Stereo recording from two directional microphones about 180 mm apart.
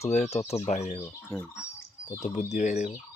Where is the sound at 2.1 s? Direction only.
40° left (ahead or behind).